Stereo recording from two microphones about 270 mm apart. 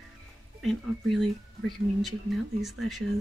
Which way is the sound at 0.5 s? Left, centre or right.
Centre.